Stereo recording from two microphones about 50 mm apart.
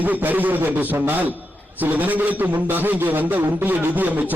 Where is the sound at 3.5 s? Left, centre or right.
Right.